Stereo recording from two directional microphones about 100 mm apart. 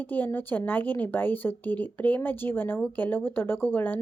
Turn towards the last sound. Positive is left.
turn(degrees=20)  # may be behind; listen again after turning